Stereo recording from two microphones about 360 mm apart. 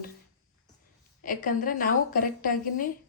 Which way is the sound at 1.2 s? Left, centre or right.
Left.